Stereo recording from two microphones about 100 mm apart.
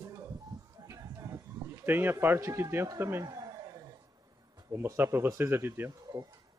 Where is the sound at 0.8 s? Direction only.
35° right (ahead or behind).